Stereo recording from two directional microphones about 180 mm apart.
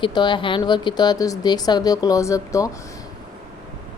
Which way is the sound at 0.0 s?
25° left (ahead or behind).